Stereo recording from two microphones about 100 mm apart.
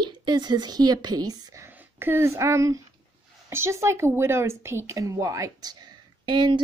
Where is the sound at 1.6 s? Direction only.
20° right (ahead or behind); by 5.8 s 40° right (ahead or behind).